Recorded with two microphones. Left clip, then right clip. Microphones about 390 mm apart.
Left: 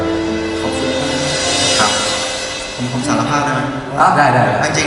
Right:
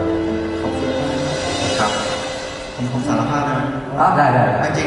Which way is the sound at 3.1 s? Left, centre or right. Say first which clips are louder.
Left 4 dB; centre.